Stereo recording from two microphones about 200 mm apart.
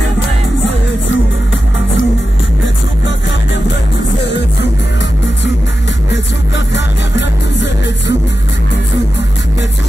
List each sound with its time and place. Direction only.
0.7 s music: 65° left (ahead or behind)
6.5 s music: 65° left (ahead or behind)